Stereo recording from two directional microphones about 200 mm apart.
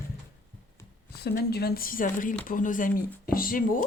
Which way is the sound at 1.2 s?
55° left (ahead or behind).